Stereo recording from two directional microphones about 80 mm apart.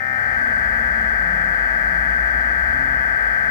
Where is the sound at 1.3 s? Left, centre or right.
Left.